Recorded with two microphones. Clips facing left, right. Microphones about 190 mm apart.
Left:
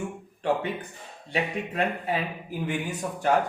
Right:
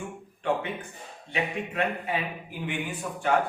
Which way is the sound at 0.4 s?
35° left (ahead or behind).